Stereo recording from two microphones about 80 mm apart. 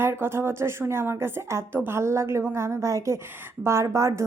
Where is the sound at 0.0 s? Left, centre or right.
Right.